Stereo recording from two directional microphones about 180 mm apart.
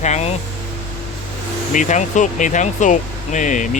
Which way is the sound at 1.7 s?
45° left (ahead or behind).